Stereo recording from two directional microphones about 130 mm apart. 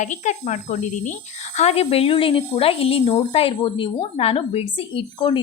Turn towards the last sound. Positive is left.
turn(degrees=45)  # may be behind; listen again after turning